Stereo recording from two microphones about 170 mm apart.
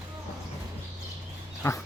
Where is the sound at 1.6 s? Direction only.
15° left (ahead or behind).